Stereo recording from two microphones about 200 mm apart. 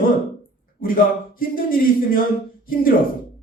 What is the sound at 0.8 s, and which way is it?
A man's voice, 45° left (ahead or behind).